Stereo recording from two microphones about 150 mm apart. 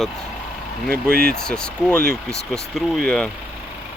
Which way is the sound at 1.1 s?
80° right.